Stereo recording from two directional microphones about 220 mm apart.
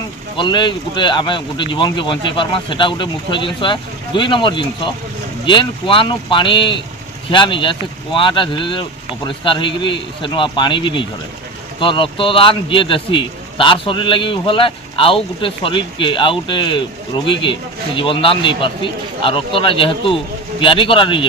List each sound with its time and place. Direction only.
0.3 s a man's voice: 20° left (ahead or behind)